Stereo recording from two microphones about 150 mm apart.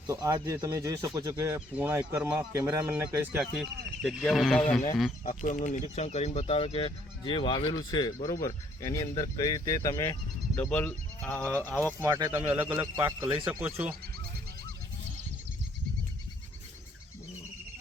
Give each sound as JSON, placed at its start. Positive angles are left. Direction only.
{"t": 0.1, "sound": "speech", "side_deg": -20}
{"t": 3.6, "sound": "speech", "side_deg": 0}
{"t": 5.2, "sound": "speech", "side_deg": 55}
{"t": 10.5, "sound": "speech", "side_deg": 10}
{"t": 12.0, "sound": "speech", "side_deg": -20}